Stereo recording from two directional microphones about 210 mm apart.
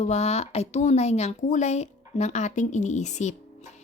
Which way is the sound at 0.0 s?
30° left (ahead or behind).